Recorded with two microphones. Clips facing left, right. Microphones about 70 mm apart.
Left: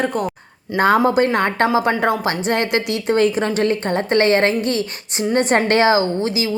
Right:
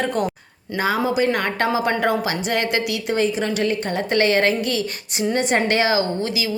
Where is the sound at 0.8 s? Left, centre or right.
Left.